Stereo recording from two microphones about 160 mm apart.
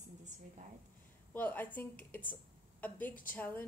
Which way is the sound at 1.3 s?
10° left (ahead or behind).